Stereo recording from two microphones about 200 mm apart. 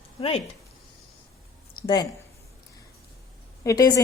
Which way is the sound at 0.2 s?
30° left (ahead or behind).